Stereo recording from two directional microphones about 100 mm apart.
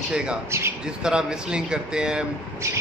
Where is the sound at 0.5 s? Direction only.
25° right (ahead or behind).